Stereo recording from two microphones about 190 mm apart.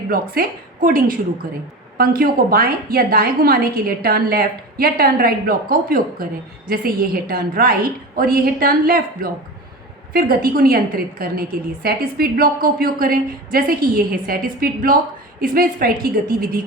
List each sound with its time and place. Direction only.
0.1 s a woman's voice: 50° right (ahead or behind)